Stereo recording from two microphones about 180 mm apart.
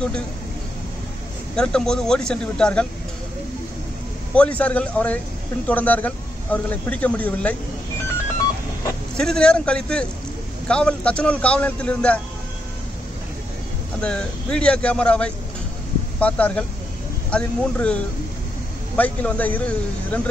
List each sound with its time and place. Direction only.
1.6 s speech: 5° left (ahead or behind)
4.4 s speech: 5° left (ahead or behind)
9.1 s speech: 5° left (ahead or behind)
14.0 s speech: 5° left (ahead or behind)